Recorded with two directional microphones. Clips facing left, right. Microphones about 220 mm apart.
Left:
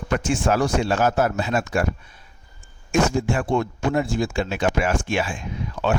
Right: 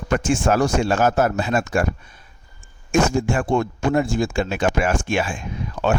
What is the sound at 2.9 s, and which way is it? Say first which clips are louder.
Speech: right 2 dB; 45° right (ahead or behind).